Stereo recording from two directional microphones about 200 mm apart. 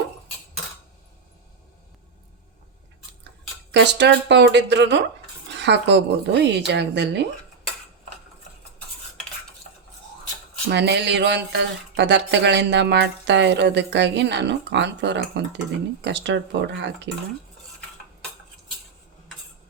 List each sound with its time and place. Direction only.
3.7 s speech: 60° right (ahead or behind)
10.7 s speech: 55° right (ahead or behind)